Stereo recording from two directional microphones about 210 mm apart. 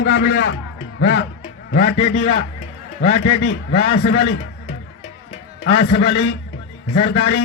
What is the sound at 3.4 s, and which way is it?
Speech, 55° left (ahead or behind).